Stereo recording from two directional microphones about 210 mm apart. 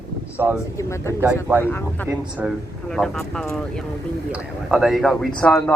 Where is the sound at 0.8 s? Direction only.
15° left (ahead or behind).